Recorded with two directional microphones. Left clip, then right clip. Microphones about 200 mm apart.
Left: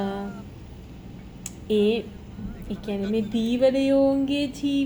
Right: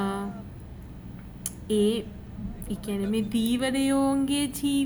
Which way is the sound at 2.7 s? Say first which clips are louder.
Left 2 dB; 30° right (ahead or behind).